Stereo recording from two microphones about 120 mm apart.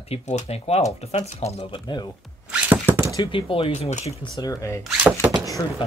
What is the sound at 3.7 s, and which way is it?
Speech, 70° left (ahead or behind).